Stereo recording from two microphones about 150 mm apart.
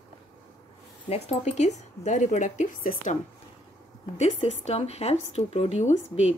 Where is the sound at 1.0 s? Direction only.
45° left (ahead or behind); by 3.2 s 65° left (ahead or behind).